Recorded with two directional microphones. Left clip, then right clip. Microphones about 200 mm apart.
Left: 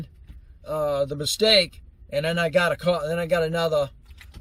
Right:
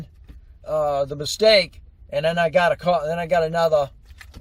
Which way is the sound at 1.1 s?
Centre (ahead or behind).